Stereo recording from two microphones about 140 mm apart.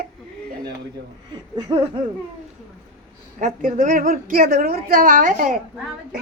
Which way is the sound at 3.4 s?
65° right (ahead or behind).